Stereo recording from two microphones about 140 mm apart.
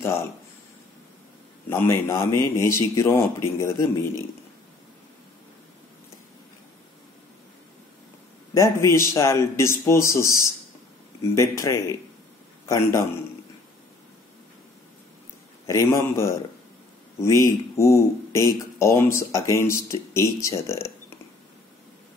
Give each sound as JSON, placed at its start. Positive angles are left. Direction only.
{"t": 1.7, "sound": "a man's voice", "side_deg": 15}
{"t": 8.5, "sound": "a man's voice", "side_deg": 20}
{"t": 15.6, "sound": "speech", "side_deg": 20}